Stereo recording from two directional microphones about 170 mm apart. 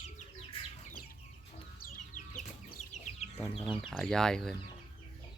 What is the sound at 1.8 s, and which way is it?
Chicken, 50° left (ahead or behind).